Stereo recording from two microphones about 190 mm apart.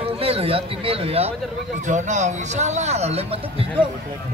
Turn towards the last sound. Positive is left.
turn(degrees=-30)  # may be behind; listen again after turning